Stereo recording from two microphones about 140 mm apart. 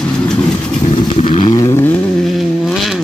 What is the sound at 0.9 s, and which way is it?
Vehicle, 40° left (ahead or behind).